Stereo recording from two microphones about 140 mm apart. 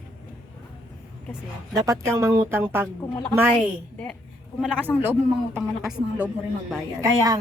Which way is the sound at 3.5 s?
5° left (ahead or behind).